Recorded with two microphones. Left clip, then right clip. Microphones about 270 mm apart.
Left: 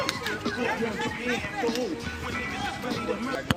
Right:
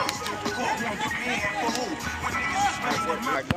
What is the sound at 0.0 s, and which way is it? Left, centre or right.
Chatter, centre.